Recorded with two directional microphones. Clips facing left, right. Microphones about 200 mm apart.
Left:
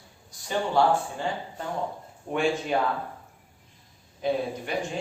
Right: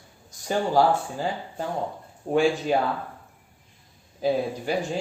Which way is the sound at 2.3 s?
35° right (ahead or behind).